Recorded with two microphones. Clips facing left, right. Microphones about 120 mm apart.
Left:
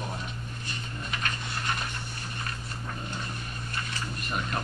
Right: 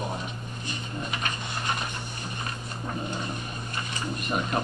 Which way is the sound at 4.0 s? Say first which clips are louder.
Right 6 dB; 15° right (ahead or behind).